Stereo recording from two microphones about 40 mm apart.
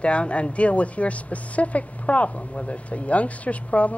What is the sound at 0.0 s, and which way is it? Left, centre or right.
Speech, left.